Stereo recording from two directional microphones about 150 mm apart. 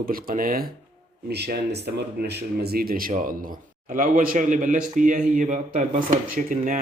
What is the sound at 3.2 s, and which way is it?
Speech, 70° right (ahead or behind).